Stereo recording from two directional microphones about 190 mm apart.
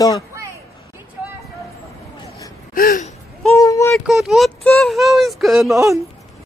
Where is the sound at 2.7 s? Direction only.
45° left (ahead or behind).